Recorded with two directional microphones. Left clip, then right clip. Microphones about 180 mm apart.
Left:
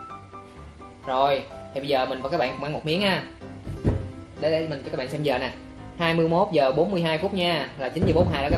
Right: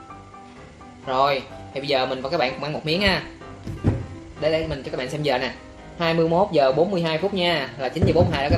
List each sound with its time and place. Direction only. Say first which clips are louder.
1.0 s speech: right 2 dB; 10° right (ahead or behind)
4.4 s speech: right 2 dB; 20° right (ahead or behind)
5.2 s speech: right 3 dB; 10° right (ahead or behind)